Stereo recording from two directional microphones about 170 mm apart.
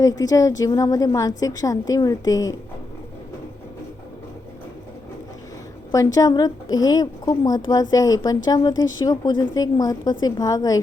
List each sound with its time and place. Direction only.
0.0 s a woman's voice: 20° left (ahead or behind)
6.1 s a woman's voice: 20° left (ahead or behind)